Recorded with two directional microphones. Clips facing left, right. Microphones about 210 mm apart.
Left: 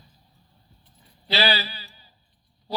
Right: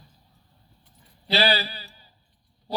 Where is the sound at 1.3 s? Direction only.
35° right (ahead or behind).